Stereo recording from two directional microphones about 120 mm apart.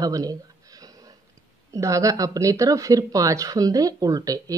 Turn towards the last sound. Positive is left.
turn(degrees=-30)  # may be behind; listen again after turning